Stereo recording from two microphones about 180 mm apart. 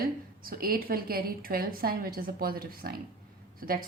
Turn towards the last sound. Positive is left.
turn(degrees=-55)  # may be behind; listen again after turning